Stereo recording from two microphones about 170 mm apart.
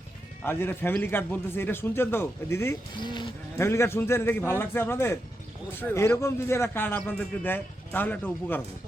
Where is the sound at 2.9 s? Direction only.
25° left (ahead or behind).